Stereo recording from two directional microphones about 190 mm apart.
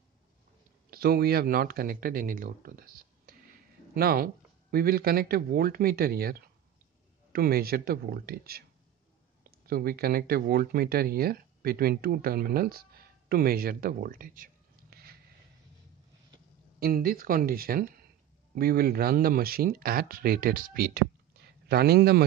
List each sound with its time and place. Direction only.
0.8 s speech: 50° right (ahead or behind)
16.8 s speech: 50° right (ahead or behind)